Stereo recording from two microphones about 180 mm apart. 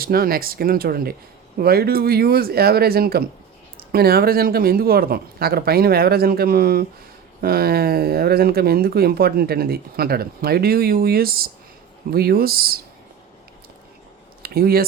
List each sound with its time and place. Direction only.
0.0 s speech: 55° right (ahead or behind)
14.4 s speech: 55° right (ahead or behind)